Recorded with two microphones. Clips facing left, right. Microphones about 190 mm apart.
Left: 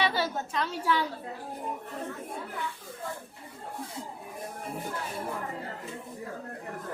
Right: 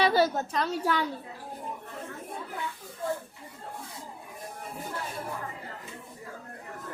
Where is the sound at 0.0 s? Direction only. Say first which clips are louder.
Right 5 dB; 40° right (ahead or behind).